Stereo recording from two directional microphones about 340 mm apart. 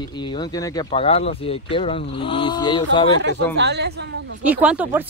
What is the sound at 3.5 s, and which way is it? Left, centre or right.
Speech, right.